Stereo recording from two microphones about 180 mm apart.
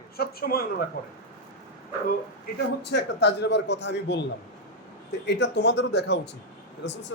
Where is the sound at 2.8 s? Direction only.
70° left (ahead or behind).